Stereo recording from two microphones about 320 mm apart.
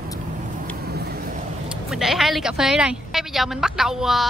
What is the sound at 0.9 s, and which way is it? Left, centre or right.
Vehicle, right.